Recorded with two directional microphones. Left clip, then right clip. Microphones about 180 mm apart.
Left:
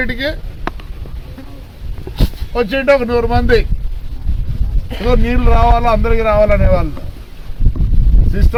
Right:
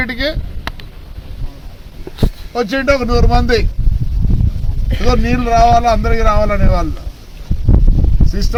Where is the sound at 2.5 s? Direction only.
10° right (ahead or behind).